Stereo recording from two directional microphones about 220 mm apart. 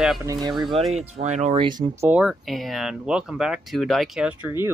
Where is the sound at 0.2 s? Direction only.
15° right (ahead or behind).